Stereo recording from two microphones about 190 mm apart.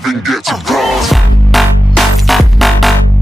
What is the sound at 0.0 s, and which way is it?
Music, centre (ahead or behind).